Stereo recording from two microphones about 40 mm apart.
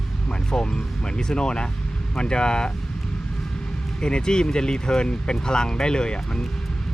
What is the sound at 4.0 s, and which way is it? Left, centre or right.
Speech, left.